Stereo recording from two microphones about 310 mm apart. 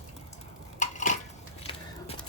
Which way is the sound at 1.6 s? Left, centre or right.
Centre.